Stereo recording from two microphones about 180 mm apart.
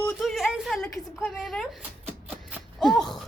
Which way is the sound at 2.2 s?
5° right (ahead or behind).